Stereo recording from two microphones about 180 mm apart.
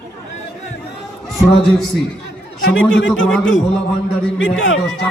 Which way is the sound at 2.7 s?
90° left.